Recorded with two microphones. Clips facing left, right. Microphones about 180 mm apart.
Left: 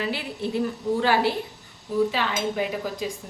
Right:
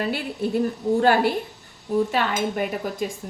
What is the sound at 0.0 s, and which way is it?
Speech, 50° right (ahead or behind).